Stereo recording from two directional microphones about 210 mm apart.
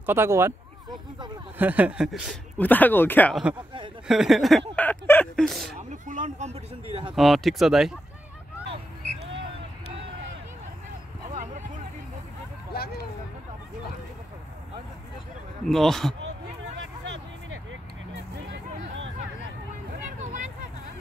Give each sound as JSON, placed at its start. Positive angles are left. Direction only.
{"t": 0.0, "sound": "a sound", "side_deg": -10}
{"t": 1.6, "sound": "speech", "side_deg": -5}
{"t": 2.6, "sound": "speech", "side_deg": 10}
{"t": 5.8, "sound": "speech", "side_deg": -35}
{"t": 7.2, "sound": "speech", "side_deg": 0}
{"t": 12.7, "sound": "hubbub", "side_deg": 50}
{"t": 15.7, "sound": "speech", "side_deg": 0}
{"t": 16.8, "sound": "vehicle", "side_deg": -60}
{"t": 20.2, "sound": "vehicle", "side_deg": -35}